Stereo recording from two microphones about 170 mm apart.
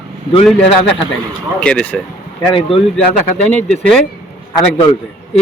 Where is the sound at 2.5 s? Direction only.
35° left (ahead or behind).